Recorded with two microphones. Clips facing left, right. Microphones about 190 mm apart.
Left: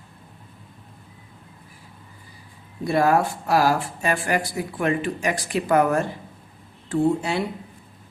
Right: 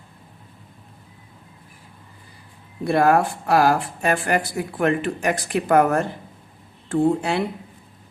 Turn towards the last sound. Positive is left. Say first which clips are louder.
# right 2 dB
turn(degrees=-60)  # may be behind; listen again after turning